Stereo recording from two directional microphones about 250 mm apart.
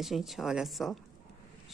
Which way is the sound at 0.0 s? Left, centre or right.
Centre.